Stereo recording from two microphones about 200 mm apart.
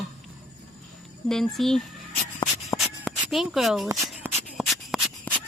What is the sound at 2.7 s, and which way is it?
Writing, centre (ahead or behind).